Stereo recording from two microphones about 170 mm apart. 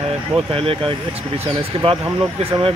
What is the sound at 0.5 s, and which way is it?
Speech, 30° right (ahead or behind).